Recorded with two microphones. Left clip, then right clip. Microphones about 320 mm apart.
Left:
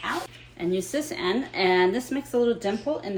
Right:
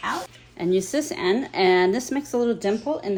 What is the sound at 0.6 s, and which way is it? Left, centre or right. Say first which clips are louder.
Speech: right 4 dB; right.